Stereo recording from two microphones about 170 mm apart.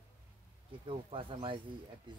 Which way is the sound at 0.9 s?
30° right (ahead or behind).